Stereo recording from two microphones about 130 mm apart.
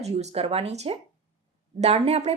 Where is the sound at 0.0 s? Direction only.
55° right (ahead or behind).